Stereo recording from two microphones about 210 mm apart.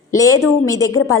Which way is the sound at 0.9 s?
90° left.